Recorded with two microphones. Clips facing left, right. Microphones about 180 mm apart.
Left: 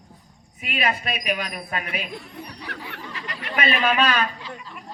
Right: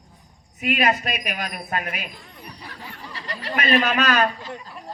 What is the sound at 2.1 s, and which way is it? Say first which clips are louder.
Chatter: left 6 dB; 70° left (ahead or behind).